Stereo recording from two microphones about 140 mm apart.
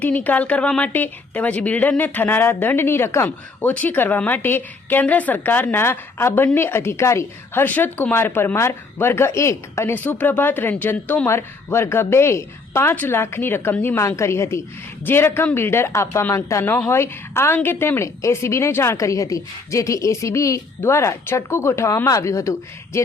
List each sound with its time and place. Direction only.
0.0 s a woman's voice: 10° left (ahead or behind)